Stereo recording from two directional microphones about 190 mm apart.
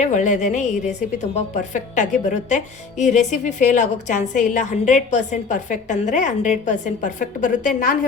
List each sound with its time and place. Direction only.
0.0 s a woman's voice: 40° left (ahead or behind)